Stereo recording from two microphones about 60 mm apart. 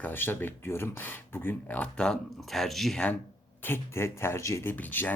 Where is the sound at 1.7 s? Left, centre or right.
Centre.